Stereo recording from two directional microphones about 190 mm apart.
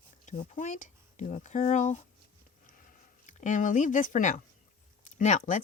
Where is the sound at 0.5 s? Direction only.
40° left (ahead or behind).